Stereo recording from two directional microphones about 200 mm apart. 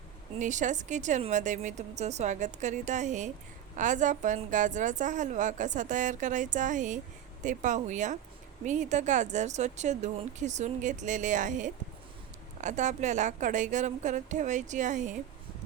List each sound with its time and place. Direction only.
0.3 s a woman's voice: 40° right (ahead or behind)